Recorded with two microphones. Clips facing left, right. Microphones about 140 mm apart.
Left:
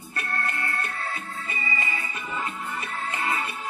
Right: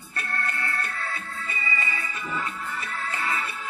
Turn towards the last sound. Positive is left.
turn(degrees=25)  # may be behind; listen again after turning